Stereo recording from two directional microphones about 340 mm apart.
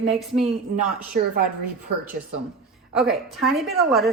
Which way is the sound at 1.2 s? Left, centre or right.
Right.